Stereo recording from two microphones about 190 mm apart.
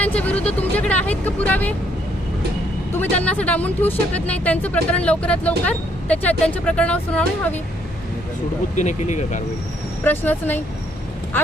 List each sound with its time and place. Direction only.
0.0 s vehicle: 5° left (ahead or behind)
0.4 s speech: 5° left (ahead or behind)
3.0 s speech: 10° left (ahead or behind)
8.7 s speech: 40° left (ahead or behind)
10.0 s speech: 10° left (ahead or behind)